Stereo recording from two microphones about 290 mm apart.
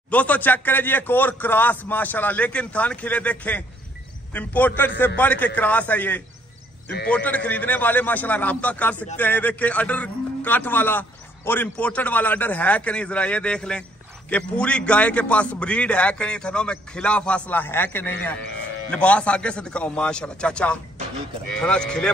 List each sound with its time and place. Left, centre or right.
0.1 s a man's voice: centre